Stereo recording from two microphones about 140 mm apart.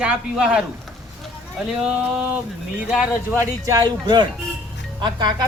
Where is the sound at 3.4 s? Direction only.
25° right (ahead or behind).